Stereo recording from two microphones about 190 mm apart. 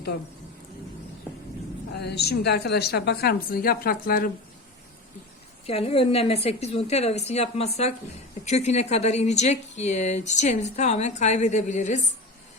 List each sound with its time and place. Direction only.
1.9 s a woman's voice: 60° left (ahead or behind)
5.6 s speech: 30° left (ahead or behind)